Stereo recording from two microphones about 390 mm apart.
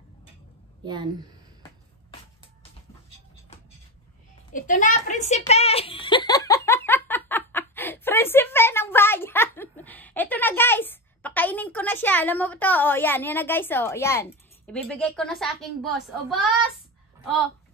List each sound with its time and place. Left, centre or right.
0.8 s a woman's voice: centre
4.5 s a child's voice: centre